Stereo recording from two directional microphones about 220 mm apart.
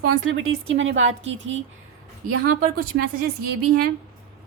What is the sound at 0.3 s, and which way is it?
A woman's voice, 60° right (ahead or behind).